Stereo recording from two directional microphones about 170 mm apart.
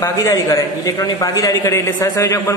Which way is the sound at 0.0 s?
20° left (ahead or behind).